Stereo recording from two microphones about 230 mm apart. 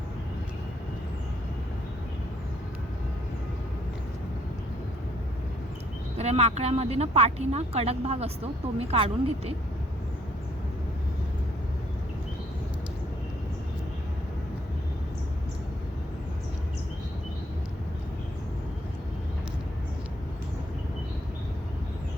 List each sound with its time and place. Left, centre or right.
6.1 s speech: right